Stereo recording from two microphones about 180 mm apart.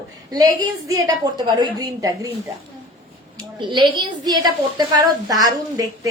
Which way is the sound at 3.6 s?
25° right (ahead or behind).